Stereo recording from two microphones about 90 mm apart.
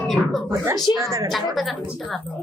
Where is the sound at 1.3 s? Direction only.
Centre (ahead or behind).